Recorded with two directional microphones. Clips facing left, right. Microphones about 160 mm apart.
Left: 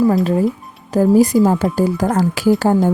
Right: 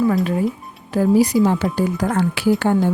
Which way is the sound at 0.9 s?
45° left (ahead or behind).